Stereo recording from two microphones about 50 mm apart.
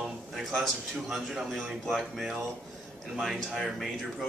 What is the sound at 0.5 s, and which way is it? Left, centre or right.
Speech, centre.